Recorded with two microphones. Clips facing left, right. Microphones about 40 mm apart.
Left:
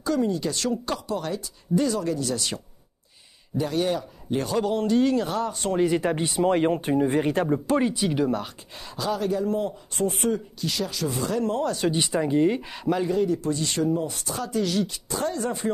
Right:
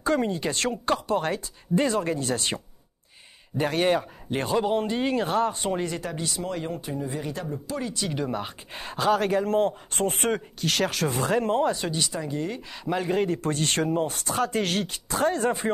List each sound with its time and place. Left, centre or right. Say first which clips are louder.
0.0 s speech: even; right
5.9 s speech: left 8 dB; left
7.8 s speech: left 6 dB; centre
8.3 s speech: left 3 dB; centre
8.7 s speech: right 5 dB; right
11.9 s speech: left 6 dB; left
13.1 s speech: left 1 dB; right